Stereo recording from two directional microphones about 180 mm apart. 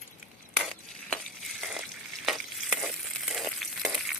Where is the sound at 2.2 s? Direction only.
Centre (ahead or behind).